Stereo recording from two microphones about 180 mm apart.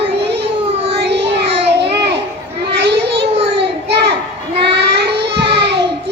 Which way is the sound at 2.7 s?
70° right (ahead or behind).